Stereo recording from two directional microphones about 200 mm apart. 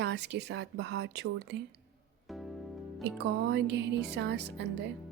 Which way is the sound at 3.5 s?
60° right (ahead or behind).